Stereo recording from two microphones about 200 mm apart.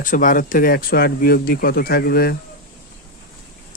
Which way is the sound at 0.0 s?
40° left (ahead or behind).